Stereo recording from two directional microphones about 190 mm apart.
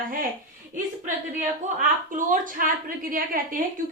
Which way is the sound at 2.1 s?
45° right (ahead or behind).